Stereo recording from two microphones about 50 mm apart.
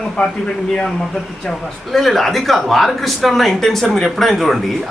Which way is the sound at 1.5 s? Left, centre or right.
Centre.